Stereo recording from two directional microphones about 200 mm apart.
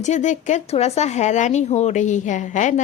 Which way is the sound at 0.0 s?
35° left (ahead or behind).